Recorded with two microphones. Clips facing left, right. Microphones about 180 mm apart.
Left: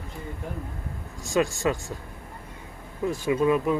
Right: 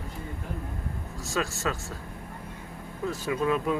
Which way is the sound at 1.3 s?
15° left (ahead or behind).